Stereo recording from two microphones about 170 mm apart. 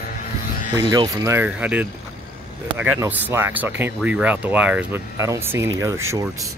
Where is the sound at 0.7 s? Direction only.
25° right (ahead or behind).